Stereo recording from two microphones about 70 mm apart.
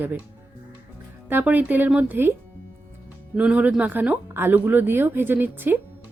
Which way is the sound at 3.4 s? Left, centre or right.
Right.